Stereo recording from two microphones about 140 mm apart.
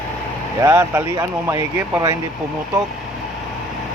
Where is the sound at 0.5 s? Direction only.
20° right (ahead or behind).